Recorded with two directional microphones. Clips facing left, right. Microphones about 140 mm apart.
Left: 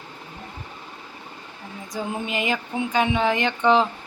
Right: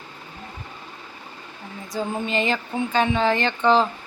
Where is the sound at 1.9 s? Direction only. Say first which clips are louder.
Right 2 dB; 10° left (ahead or behind).